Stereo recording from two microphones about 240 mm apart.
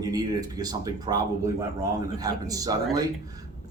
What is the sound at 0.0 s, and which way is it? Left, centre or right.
Speech, centre.